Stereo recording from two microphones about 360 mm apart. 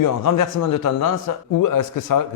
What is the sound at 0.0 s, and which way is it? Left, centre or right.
Speech, left.